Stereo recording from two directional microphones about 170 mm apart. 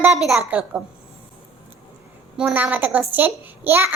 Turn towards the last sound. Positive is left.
turn(degrees=-15)  # may be behind; listen again after turning